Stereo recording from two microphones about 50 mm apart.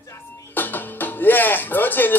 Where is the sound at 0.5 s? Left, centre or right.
Left.